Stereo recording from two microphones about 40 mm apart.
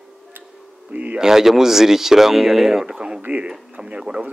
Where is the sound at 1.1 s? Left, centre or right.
Centre.